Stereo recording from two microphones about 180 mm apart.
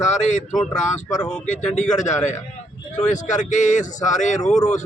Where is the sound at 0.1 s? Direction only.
40° left (ahead or behind).